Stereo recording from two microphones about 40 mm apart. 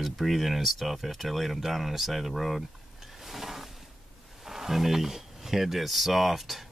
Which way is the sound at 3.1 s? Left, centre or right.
Centre.